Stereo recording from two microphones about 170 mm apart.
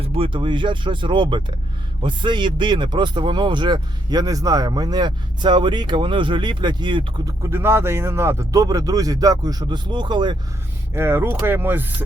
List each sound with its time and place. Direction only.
0.0 s speech: 35° right (ahead or behind)
10.9 s speech: 15° right (ahead or behind)